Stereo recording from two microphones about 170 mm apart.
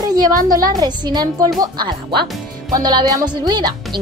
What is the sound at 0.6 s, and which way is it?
A woman's voice, 25° right (ahead or behind).